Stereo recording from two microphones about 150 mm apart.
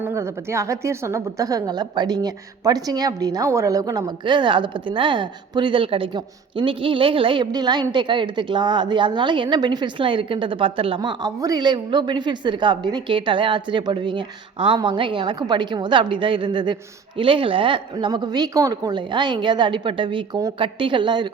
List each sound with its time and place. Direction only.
0.0 s a woman's voice: 20° right (ahead or behind)